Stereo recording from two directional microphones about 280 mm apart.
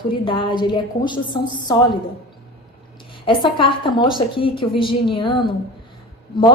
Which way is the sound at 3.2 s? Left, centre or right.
Centre.